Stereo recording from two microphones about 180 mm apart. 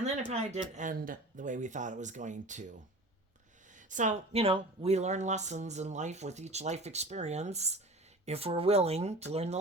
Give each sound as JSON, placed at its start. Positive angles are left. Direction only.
{"t": 0.0, "sound": "speech", "side_deg": -40}
{"t": 3.8, "sound": "speech", "side_deg": -45}